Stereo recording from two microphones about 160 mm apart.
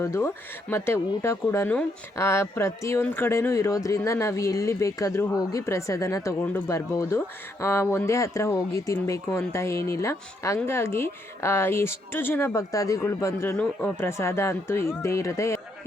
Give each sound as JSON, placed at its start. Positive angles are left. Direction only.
{"t": 0.0, "sound": "a woman's voice", "side_deg": 20}